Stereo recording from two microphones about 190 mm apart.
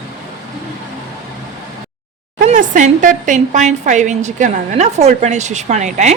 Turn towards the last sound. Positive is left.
turn(degrees=-40)  # may be behind; listen again after turning